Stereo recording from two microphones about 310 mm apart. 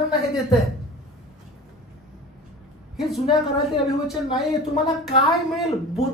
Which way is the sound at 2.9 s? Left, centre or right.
Centre.